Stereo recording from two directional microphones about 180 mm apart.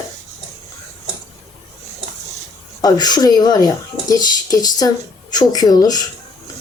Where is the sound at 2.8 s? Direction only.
20° left (ahead or behind).